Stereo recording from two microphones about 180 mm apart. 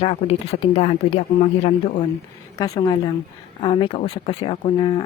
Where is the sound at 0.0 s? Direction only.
35° left (ahead or behind).